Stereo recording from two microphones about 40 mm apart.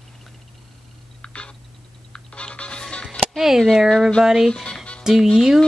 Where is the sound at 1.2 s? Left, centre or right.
Left.